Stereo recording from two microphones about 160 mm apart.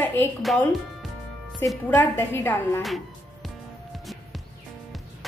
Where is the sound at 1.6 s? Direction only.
15° left (ahead or behind).